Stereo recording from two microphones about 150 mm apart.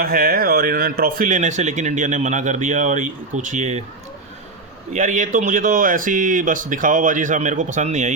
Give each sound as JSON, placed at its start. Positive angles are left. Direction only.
{"t": 0.0, "sound": "speech", "side_deg": -80}
{"t": 4.9, "sound": "speech", "side_deg": -55}